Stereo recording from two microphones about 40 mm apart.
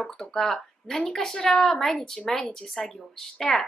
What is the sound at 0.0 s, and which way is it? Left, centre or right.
A woman's voice, centre.